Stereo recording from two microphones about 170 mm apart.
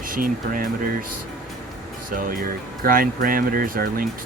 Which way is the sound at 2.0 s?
55° right (ahead or behind).